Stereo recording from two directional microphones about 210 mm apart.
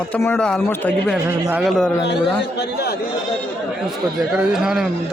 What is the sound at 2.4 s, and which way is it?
Speech, 55° left (ahead or behind).